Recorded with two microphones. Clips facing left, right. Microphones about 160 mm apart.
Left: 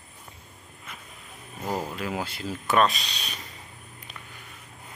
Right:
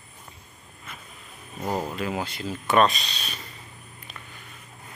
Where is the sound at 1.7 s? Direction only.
20° right (ahead or behind).